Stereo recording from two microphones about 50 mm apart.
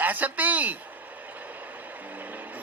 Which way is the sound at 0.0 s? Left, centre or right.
Right.